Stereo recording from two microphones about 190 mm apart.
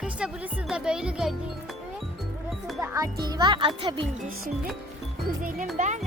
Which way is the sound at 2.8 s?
15° right (ahead or behind).